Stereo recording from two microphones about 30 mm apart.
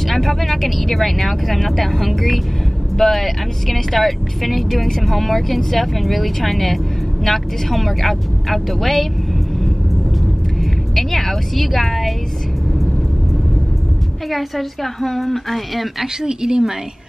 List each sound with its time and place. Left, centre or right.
0.1 s speech: centre
10.6 s music: centre
14.3 s a woman's voice: centre
16.2 s speech: right